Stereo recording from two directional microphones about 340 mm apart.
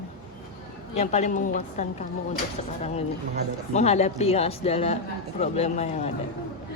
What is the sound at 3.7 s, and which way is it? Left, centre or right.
A woman's voice, centre.